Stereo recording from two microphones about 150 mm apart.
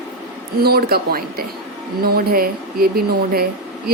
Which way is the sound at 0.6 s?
90° right.